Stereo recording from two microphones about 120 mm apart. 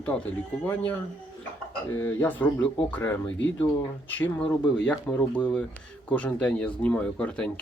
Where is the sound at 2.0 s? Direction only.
20° left (ahead or behind).